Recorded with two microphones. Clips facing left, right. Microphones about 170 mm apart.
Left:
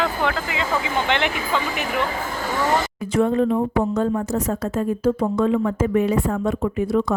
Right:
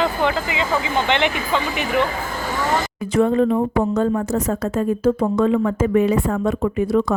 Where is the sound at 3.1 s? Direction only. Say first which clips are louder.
Right 2 dB; 90° right.